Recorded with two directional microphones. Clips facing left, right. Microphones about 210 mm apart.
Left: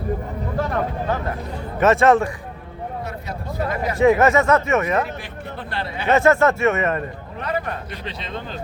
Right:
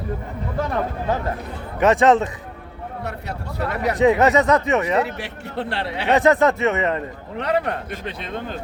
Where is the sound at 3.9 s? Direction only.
20° right (ahead or behind).